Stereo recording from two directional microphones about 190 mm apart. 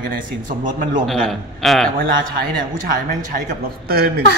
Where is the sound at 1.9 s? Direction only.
50° right (ahead or behind).